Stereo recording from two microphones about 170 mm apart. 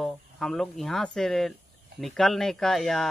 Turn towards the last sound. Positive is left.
turn(degrees=0)  # may be behind; listen again after turning